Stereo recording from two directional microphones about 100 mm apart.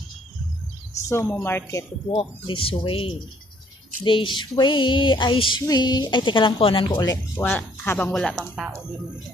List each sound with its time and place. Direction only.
1.0 s speech: 30° left (ahead or behind)
1.3 s speech: 20° left (ahead or behind)
2.0 s speech: 60° left (ahead or behind)
5.6 s speech: 45° left (ahead or behind); by 7.0 s 65° left (ahead or behind)
7.3 s speech: 20° left (ahead or behind)
8.1 s speech: 5° left (ahead or behind)